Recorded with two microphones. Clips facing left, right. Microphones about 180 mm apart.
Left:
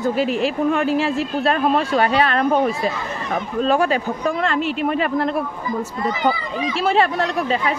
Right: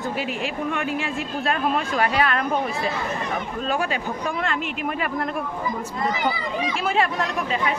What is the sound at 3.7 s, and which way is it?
Speech, 40° left (ahead or behind).